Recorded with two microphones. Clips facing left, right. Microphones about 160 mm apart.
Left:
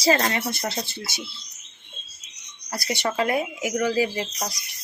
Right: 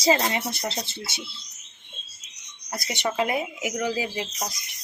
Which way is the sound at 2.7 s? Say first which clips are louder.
Left 2 dB; 20° right (ahead or behind).